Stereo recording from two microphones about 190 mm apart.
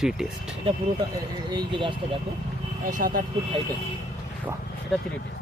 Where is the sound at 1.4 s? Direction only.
25° right (ahead or behind).